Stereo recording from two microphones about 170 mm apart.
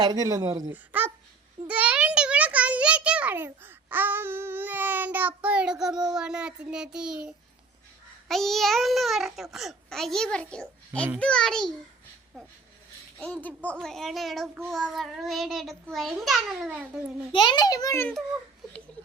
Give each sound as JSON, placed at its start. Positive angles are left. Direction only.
{"t": 0.0, "sound": "speech", "side_deg": -20}
{"t": 0.7, "sound": "a sound", "side_deg": -10}
{"t": 6.1, "sound": "a child's voice", "side_deg": -5}
{"t": 13.1, "sound": "a child's voice", "side_deg": 5}
{"t": 17.3, "sound": "a child's voice", "side_deg": 25}